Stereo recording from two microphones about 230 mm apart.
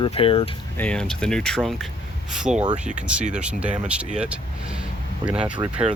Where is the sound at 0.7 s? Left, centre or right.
Centre.